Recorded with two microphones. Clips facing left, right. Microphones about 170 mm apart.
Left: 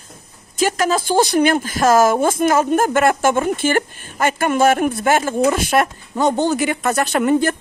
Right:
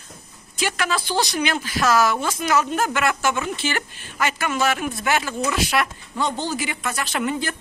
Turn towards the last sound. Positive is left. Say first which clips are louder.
# left 9 dB
turn(degrees=50)  # may be behind; listen again after turning